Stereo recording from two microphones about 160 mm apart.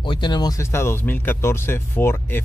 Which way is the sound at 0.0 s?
30° left (ahead or behind).